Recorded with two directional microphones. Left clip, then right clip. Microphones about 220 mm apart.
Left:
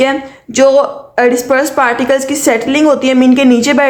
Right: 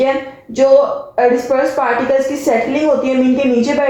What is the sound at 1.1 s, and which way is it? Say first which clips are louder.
Speech: left 3 dB; 45° left (ahead or behind).